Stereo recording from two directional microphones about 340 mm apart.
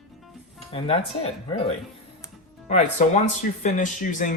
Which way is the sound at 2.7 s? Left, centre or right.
Centre.